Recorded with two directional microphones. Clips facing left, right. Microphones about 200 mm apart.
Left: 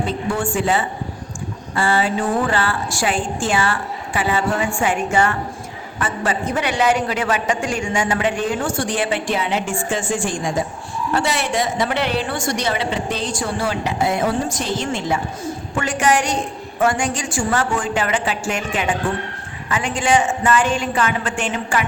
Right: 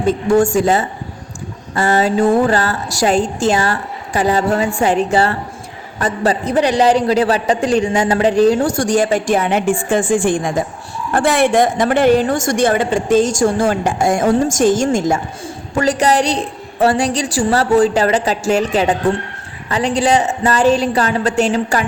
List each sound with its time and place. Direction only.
0.1 s a man's voice: 40° right (ahead or behind)